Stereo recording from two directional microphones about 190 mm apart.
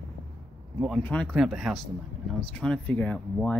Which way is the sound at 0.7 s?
Centre (ahead or behind).